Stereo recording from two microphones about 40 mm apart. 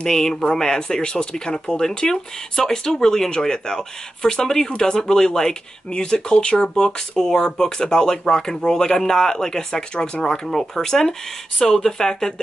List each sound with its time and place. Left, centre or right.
0.0 s speech: centre
10.2 s speech: centre